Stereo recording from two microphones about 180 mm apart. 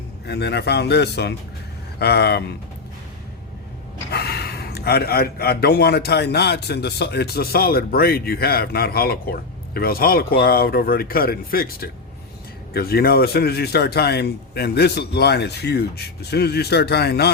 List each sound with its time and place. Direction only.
0.3 s a man's voice: 65° left (ahead or behind)
4.1 s a man's voice: 65° left (ahead or behind)